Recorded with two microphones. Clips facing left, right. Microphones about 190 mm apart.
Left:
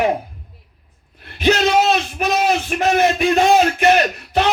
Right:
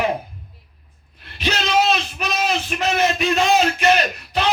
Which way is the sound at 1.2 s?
55° left (ahead or behind).